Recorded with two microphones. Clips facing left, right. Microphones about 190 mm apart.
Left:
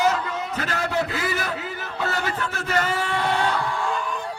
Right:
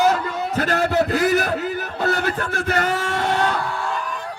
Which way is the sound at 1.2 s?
60° right (ahead or behind).